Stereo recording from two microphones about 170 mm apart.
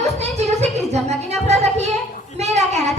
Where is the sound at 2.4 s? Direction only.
40° right (ahead or behind).